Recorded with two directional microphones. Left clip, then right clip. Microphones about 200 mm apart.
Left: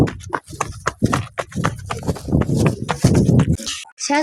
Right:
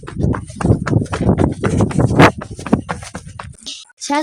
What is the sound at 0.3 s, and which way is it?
Horse, 45° left (ahead or behind).